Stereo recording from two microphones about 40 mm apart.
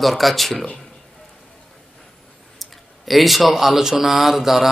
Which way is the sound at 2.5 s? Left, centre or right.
Centre.